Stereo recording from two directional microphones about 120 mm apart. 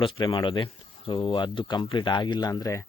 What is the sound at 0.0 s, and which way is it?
Speech, 45° left (ahead or behind).